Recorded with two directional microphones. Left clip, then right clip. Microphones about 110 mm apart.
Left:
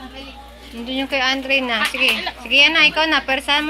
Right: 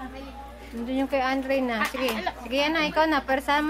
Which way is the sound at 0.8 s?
15° right (ahead or behind).